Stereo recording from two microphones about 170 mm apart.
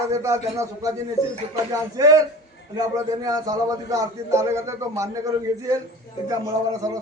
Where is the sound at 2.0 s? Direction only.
20° right (ahead or behind).